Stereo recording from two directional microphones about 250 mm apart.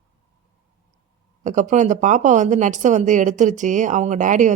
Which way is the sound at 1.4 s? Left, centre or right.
Right.